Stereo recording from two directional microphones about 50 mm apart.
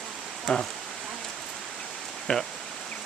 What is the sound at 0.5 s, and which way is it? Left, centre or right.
Speech, left.